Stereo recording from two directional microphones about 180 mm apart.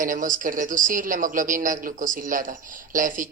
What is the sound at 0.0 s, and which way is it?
Speech, 50° right (ahead or behind).